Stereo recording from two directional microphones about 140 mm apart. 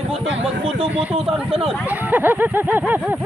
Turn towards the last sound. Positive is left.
turn(degrees=-15)  # may be behind; listen again after turning